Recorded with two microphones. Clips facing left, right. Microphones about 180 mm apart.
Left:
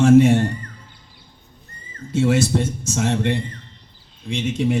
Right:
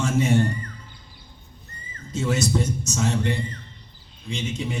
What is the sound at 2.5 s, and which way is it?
Speech, 80° left.